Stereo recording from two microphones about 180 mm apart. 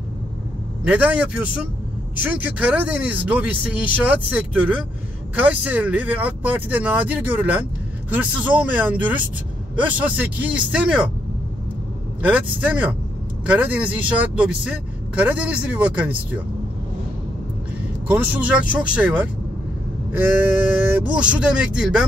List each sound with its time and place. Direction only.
0.8 s speech: 10° right (ahead or behind)
12.2 s speech: 10° right (ahead or behind)
18.0 s speech: 10° right (ahead or behind)
20.9 s speech: 5° right (ahead or behind)